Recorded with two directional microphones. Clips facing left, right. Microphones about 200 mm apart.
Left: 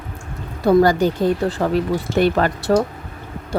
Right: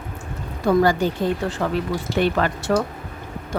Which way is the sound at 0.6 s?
35° left (ahead or behind).